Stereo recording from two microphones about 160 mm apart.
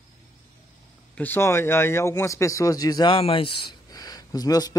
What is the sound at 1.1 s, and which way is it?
Speech, 15° left (ahead or behind).